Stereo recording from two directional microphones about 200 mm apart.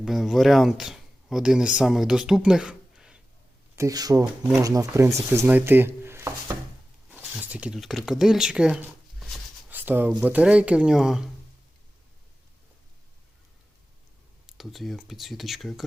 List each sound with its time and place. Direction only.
0.0 s speech: centre (ahead or behind)
3.8 s speech: 20° right (ahead or behind)
14.4 s speech: centre (ahead or behind)